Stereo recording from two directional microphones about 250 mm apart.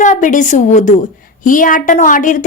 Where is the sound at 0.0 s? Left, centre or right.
Left.